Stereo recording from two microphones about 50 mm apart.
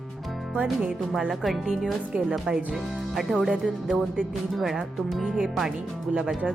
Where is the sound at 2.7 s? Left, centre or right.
Centre.